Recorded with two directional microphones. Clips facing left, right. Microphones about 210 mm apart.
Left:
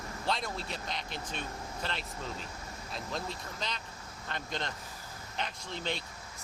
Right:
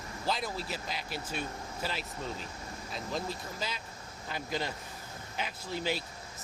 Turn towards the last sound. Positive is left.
turn(degrees=-5)  # may be behind; listen again after turning